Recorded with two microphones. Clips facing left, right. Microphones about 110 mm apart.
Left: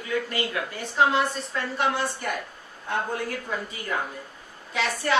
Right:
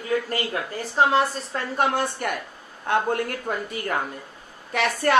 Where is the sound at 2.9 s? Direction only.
65° right (ahead or behind).